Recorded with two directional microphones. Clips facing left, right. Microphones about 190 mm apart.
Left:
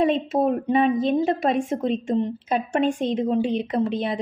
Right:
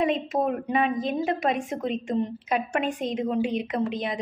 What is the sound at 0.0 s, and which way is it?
A woman's voice, 30° left (ahead or behind).